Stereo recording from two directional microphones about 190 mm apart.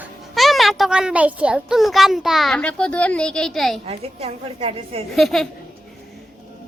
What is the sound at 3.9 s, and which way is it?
A woman's voice, 30° right (ahead or behind).